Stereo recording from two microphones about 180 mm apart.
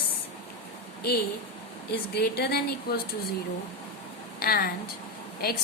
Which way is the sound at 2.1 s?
65° left (ahead or behind).